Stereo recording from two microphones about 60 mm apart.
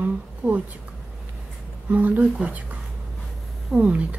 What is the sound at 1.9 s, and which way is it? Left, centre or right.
Speech, right.